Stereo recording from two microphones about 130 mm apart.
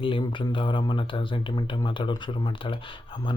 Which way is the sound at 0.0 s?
40° left (ahead or behind).